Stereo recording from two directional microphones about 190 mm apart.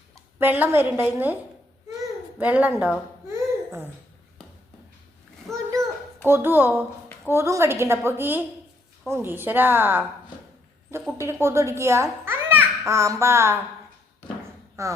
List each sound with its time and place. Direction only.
0.3 s a woman's voice: 10° right (ahead or behind)
2.4 s a child's voice: 10° right (ahead or behind)
5.5 s a child's voice: centre (ahead or behind)
6.2 s a woman's voice: 10° right (ahead or behind)
11.2 s a child's voice: 15° right (ahead or behind)
14.8 s a woman's voice: 15° right (ahead or behind)